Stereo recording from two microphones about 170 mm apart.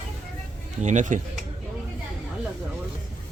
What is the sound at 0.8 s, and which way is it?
Speech, 45° right (ahead or behind).